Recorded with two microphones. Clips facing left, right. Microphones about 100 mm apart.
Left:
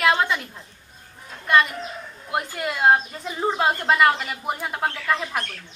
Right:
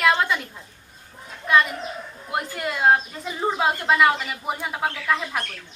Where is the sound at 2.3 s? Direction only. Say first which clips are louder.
Left 1 dB; centre (ahead or behind).